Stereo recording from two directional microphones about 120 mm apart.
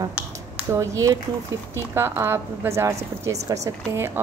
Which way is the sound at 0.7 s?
25° right (ahead or behind).